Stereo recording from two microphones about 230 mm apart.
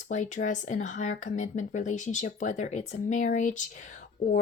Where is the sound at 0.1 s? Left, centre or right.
Left.